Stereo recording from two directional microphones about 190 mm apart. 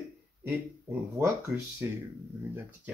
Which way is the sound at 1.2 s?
15° right (ahead or behind).